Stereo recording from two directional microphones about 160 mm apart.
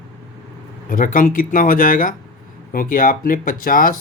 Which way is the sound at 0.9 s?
55° left (ahead or behind).